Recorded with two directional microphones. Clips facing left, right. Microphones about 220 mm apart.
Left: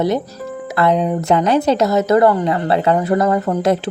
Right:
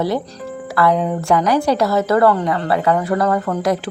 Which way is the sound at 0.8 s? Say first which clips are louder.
Left 1 dB; 20° left (ahead or behind).